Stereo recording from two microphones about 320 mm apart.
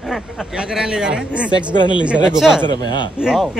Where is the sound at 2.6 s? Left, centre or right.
Centre.